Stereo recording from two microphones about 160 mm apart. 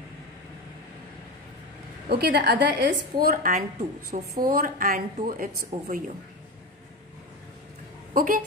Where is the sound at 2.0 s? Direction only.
75° right (ahead or behind); by 6.1 s 55° right (ahead or behind).